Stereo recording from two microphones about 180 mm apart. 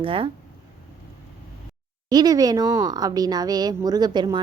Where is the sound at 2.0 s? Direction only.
20° right (ahead or behind).